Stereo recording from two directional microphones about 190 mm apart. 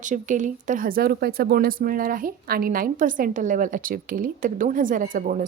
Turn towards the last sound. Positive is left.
turn(degrees=-45)  # may be behind; listen again after turning